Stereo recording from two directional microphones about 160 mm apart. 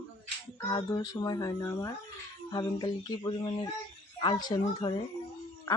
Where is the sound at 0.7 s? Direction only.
25° left (ahead or behind).